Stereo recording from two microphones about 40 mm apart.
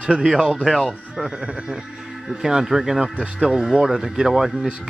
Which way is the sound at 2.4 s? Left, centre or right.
Centre.